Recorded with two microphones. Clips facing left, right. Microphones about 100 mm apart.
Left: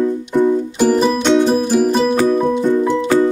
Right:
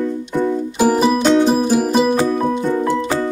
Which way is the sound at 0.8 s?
10° right (ahead or behind).